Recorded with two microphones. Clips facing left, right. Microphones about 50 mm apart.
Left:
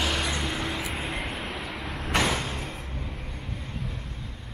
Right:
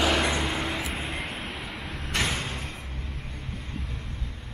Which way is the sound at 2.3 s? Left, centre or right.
Centre.